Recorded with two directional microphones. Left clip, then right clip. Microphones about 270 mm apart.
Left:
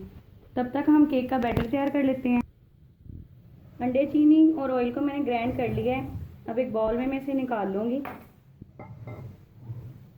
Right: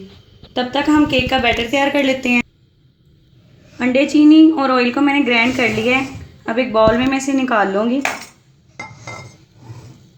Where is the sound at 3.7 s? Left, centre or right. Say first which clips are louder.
Right 10 dB; right.